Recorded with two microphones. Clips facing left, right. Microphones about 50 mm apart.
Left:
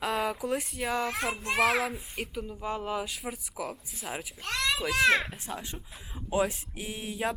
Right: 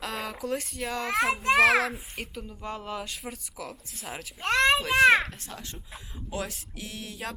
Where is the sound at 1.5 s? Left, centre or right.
Right.